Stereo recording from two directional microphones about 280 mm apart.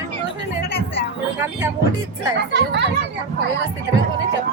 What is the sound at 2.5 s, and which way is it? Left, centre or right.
Speech, right.